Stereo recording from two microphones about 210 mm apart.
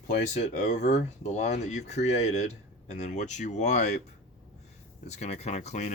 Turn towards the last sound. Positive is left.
turn(degrees=35)  # may be behind; listen again after turning